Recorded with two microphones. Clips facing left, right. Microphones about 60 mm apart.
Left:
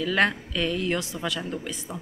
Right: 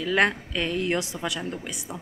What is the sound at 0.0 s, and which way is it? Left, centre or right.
A woman's voice, right.